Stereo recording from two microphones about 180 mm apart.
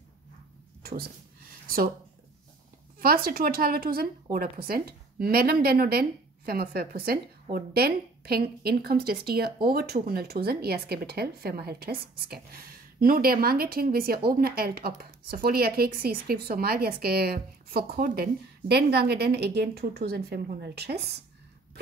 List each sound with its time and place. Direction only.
0.8 s speech: 60° right (ahead or behind)
3.0 s speech: 55° right (ahead or behind)